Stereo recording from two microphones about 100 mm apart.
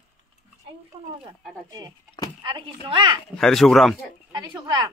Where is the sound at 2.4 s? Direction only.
50° right (ahead or behind).